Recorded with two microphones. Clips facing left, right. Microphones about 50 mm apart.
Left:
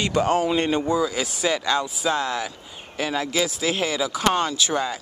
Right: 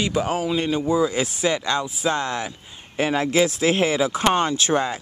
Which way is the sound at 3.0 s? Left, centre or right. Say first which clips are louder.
Right 4 dB; right.